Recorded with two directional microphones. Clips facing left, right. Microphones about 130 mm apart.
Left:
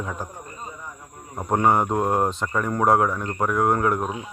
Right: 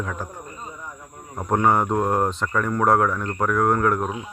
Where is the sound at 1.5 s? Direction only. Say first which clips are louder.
Even; 15° left (ahead or behind).